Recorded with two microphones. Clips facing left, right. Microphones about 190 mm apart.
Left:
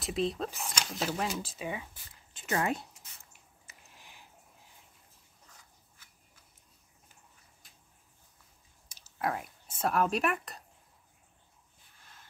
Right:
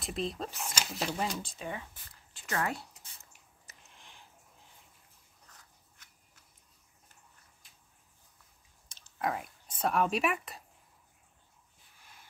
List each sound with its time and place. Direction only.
0.0 s speech: centre (ahead or behind)
2.3 s a woman's voice: 20° left (ahead or behind)
3.9 s sniff: 5° left (ahead or behind)
8.8 s speech: 5° left (ahead or behind)